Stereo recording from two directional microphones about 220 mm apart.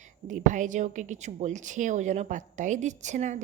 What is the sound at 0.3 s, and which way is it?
Speech, 35° right (ahead or behind).